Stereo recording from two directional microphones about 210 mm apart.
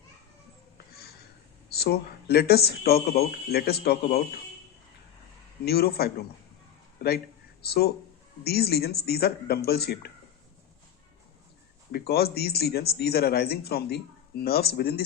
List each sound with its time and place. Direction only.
0.9 s a sound: 50° left (ahead or behind)
1.7 s speech: 50° left (ahead or behind)
5.6 s speech: 50° left (ahead or behind)
8.4 s speech: 50° left (ahead or behind)
11.9 s speech: 50° left (ahead or behind)